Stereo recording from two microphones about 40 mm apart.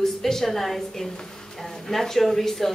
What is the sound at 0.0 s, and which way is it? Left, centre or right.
A woman's voice, centre.